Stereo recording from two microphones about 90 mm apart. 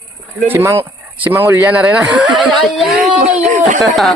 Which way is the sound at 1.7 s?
15° right (ahead or behind).